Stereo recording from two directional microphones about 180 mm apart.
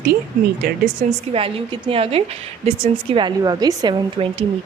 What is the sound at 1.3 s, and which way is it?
A woman's voice, 30° right (ahead or behind).